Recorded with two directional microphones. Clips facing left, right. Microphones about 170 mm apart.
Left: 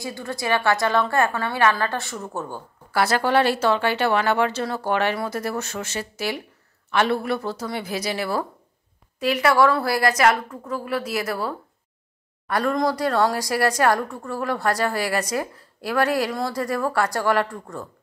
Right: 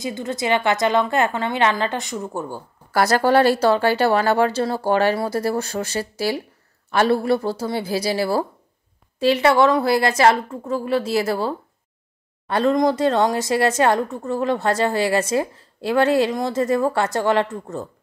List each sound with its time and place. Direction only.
0.0 s a woman's voice: 20° right (ahead or behind)
2.9 s a woman's voice: 40° right (ahead or behind); by 17.8 s 25° right (ahead or behind)